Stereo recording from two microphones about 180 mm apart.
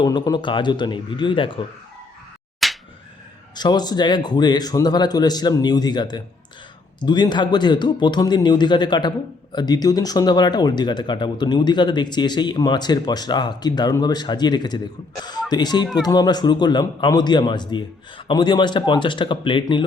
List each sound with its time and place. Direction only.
0.0 s speech: 25° left (ahead or behind)
2.6 s slap: centre (ahead or behind)
3.5 s speech: 25° left (ahead or behind)